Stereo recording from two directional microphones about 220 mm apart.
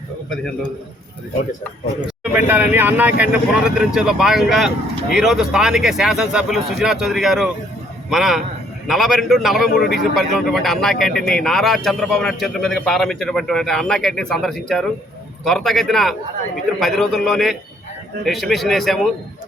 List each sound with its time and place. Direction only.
0.3 s a man's voice: 5° left (ahead or behind)
2.0 s a man's voice: 10° right (ahead or behind)